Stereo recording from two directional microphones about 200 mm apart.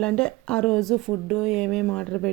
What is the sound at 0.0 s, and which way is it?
Speech, 5° left (ahead or behind).